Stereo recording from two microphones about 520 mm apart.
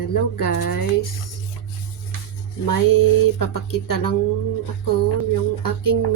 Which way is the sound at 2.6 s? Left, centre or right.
Left.